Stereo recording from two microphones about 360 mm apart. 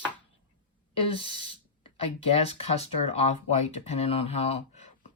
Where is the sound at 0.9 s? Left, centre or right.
Centre.